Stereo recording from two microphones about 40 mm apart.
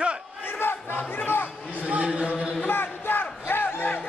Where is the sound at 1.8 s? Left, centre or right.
Right.